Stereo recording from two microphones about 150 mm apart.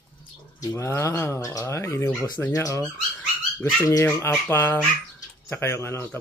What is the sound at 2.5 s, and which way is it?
Speech, 20° left (ahead or behind).